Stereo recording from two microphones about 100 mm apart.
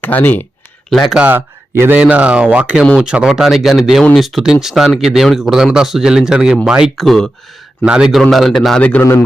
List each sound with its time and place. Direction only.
0.0 s speech: 15° left (ahead or behind)
1.1 s speech: 15° right (ahead or behind)
2.0 s speech: 15° right (ahead or behind); by 8.9 s 5° left (ahead or behind)